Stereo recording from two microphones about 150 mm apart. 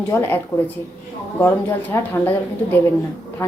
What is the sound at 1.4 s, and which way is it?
A woman's voice, 15° left (ahead or behind).